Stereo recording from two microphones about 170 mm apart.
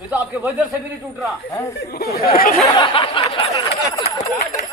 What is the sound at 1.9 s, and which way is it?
Speech, 65° left (ahead or behind).